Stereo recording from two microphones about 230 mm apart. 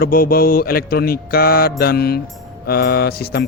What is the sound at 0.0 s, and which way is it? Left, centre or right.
Speech, left.